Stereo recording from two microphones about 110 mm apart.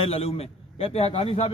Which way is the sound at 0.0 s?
65° left (ahead or behind).